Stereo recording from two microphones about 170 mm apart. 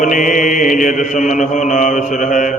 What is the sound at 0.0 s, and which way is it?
Mantra, 50° left (ahead or behind).